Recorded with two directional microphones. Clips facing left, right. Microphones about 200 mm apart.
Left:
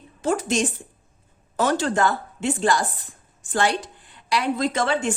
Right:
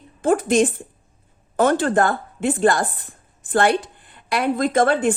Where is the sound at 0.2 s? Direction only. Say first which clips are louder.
Right 6 dB; 55° right (ahead or behind).